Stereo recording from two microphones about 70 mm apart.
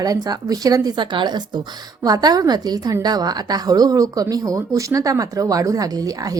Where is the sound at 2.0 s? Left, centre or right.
Right.